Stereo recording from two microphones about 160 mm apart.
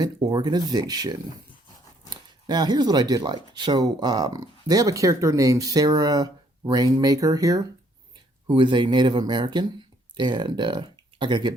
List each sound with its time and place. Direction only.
0.0 s speech: 25° right (ahead or behind)